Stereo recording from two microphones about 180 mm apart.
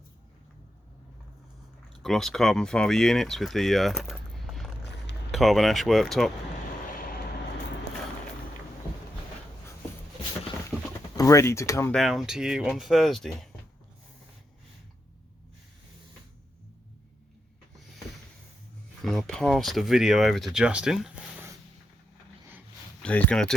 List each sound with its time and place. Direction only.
1.9 s speech: centre (ahead or behind)
4.8 s a sound: 75° left (ahead or behind)
5.3 s speech: centre (ahead or behind)
6.8 s vehicle: 50° left (ahead or behind)
10.7 s a sound: 5° right (ahead or behind)
11.2 s speech: 15° left (ahead or behind)
11.9 s speech: centre (ahead or behind)
19.0 s speech: centre (ahead or behind)
23.0 s speech: 5° left (ahead or behind)